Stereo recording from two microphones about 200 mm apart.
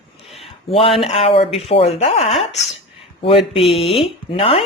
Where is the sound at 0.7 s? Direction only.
30° left (ahead or behind).